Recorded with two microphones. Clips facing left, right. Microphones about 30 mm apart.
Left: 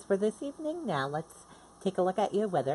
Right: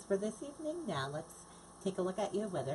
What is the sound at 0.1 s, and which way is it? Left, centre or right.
Speech, left.